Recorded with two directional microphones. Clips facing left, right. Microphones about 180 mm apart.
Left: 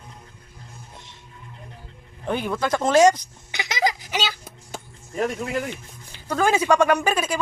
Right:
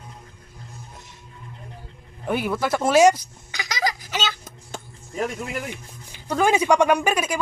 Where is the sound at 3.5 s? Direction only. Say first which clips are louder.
Left 2 dB; 20° left (ahead or behind).